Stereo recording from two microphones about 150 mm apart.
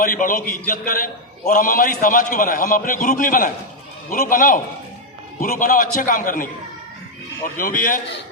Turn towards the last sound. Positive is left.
turn(degrees=65)  # may be behind; listen again after turning